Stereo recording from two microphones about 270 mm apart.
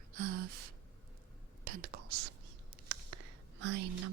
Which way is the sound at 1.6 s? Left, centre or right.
Right.